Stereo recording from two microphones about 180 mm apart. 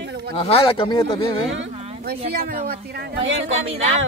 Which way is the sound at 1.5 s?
75° right (ahead or behind).